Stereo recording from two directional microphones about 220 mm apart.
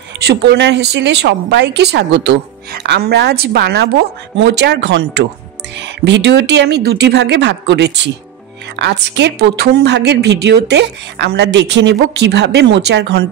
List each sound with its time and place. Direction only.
0.2 s a woman's voice: 50° right (ahead or behind)